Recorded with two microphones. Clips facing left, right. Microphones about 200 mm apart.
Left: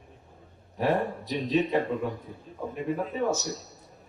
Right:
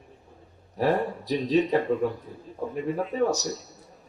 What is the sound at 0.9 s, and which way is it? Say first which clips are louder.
Speech: right 1 dB; 35° right (ahead or behind).